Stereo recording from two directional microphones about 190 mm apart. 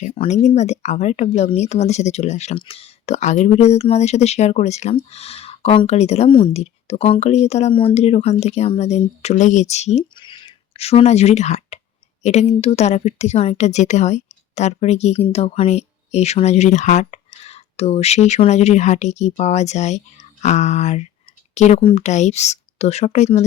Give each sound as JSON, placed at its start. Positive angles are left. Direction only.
{"t": 0.0, "sound": "speech", "side_deg": 35}